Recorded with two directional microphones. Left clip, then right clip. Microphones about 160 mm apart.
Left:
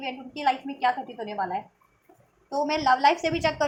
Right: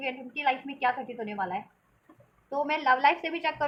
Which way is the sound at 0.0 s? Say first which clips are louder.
Left 2 dB; 20° left (ahead or behind).